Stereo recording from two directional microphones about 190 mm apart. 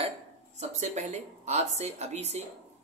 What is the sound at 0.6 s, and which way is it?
A man's voice, 35° right (ahead or behind).